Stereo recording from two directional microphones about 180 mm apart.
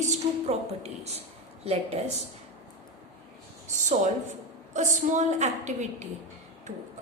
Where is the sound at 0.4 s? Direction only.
35° right (ahead or behind).